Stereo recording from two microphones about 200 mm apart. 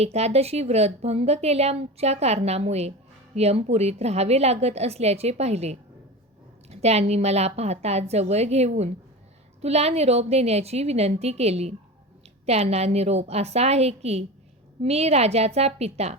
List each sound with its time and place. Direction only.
0.0 s a woman's voice: 30° right (ahead or behind)